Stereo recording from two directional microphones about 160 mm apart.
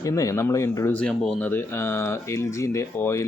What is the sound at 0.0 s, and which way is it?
Speech, 20° left (ahead or behind).